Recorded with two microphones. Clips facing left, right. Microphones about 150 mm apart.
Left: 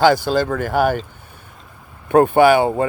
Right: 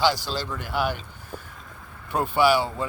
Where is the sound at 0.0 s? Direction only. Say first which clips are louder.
Left 10 dB; 50° left (ahead or behind).